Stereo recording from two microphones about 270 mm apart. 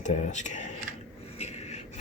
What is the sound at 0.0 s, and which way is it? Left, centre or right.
Speech, left.